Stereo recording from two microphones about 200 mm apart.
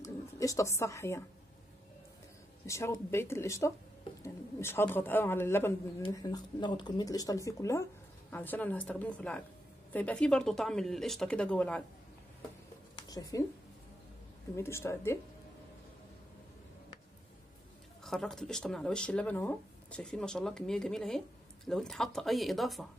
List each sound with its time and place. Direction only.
0.0 s speech: 15° left (ahead or behind)
2.6 s speech: 15° left (ahead or behind)
13.1 s speech: 15° left (ahead or behind)
14.5 s speech: 10° left (ahead or behind)
18.0 s speech: centre (ahead or behind)